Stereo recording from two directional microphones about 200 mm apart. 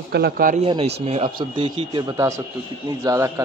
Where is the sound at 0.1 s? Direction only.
50° right (ahead or behind).